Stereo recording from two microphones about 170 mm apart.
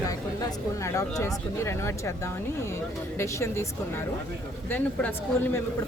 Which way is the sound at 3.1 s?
15° left (ahead or behind).